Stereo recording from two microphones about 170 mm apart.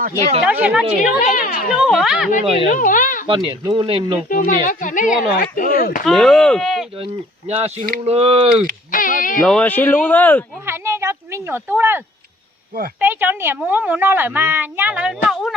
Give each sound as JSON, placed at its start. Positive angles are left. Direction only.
{"t": 0.4, "sound": "speech", "side_deg": -10}
{"t": 1.2, "sound": "speech", "side_deg": 50}
{"t": 1.8, "sound": "speech", "side_deg": -5}
{"t": 2.4, "sound": "speech", "side_deg": -30}
{"t": 2.6, "sound": "speech", "side_deg": 50}
{"t": 3.4, "sound": "speech", "side_deg": -30}
{"t": 4.3, "sound": "speech", "side_deg": 50}
{"t": 6.1, "sound": "speech", "side_deg": 0}
{"t": 7.0, "sound": "speech", "side_deg": -35}
{"t": 8.9, "sound": "a sound", "side_deg": 50}
{"t": 9.4, "sound": "speech", "side_deg": 5}
{"t": 10.7, "sound": "a sound", "side_deg": -15}
{"t": 13.0, "sound": "speech", "side_deg": -10}